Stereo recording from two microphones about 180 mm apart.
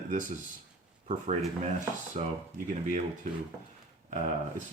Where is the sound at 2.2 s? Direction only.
35° right (ahead or behind).